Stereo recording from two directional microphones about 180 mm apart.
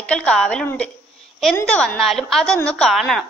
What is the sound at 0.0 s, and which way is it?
A woman's voice, 5° left (ahead or behind).